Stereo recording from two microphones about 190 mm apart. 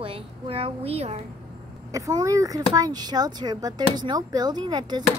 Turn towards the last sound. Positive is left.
turn(degrees=-20)  # may be behind; listen again after turning